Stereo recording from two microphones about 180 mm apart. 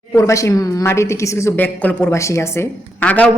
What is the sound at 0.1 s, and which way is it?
A woman's voice, 15° left (ahead or behind).